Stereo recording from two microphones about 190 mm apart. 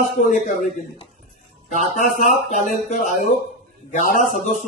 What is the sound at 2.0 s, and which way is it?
Speech, 40° left (ahead or behind).